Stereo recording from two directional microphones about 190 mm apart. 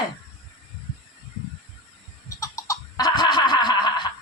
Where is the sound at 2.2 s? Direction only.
15° left (ahead or behind).